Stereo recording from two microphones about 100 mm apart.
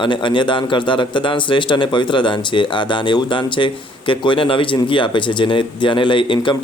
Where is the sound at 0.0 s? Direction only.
55° left (ahead or behind).